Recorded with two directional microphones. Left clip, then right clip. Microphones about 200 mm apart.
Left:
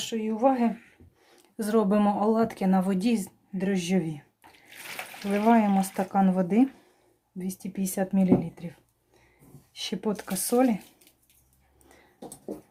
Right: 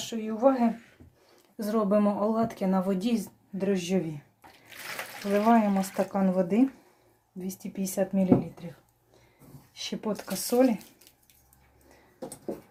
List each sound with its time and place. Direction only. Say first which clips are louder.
0.0 s speech: even; 35° left (ahead or behind)
5.3 s speech: left 1 dB; 30° left (ahead or behind)
9.7 s speech: left 2 dB; 30° left (ahead or behind)